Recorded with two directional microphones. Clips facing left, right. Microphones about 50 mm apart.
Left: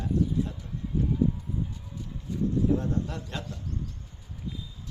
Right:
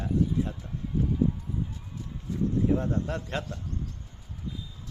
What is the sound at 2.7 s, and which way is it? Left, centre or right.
Speech, right.